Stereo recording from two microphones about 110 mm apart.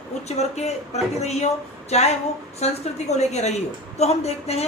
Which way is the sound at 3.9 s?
75° left (ahead or behind).